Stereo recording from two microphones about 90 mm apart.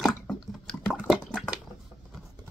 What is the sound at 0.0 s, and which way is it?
Water, centre (ahead or behind).